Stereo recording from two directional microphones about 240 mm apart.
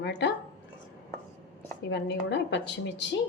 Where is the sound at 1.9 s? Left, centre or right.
Left.